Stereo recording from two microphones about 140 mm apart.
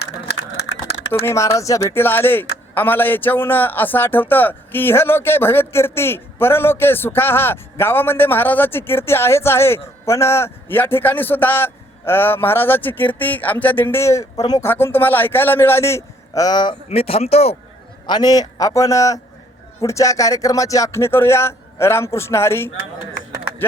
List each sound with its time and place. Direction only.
1.2 s a man's voice: 20° left (ahead or behind)
14.6 s a man's voice: 15° left (ahead or behind)
16.9 s speech: 45° left (ahead or behind)
18.0 s speech: 30° left (ahead or behind)